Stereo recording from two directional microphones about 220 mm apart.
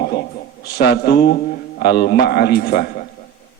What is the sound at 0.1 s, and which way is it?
A man's voice, 50° left (ahead or behind).